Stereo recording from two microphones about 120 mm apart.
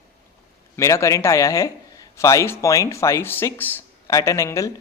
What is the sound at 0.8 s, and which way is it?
Speech, 25° left (ahead or behind).